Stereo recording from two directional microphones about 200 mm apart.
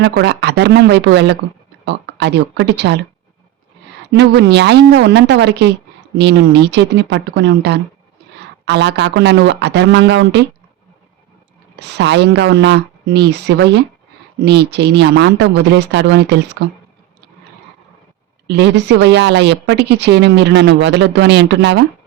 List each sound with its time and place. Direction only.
0.0 s speech: 60° right (ahead or behind)
4.1 s speech: 60° right (ahead or behind)
11.8 s speech: 60° right (ahead or behind)
18.4 s speech: 55° right (ahead or behind)